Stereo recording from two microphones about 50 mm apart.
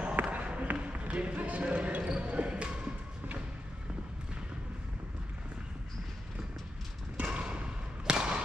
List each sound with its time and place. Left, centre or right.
0.0 s basketball bounce: right
7.2 s thump: right
8.1 s a sound: centre